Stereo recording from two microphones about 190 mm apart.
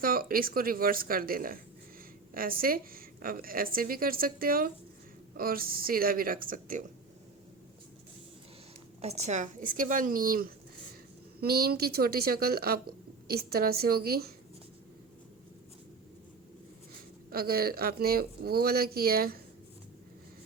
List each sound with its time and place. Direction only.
0.0 s a woman's voice: 50° right (ahead or behind)
9.0 s a woman's voice: 35° right (ahead or behind); by 14.3 s 55° right (ahead or behind)
17.3 s a woman's voice: 55° right (ahead or behind)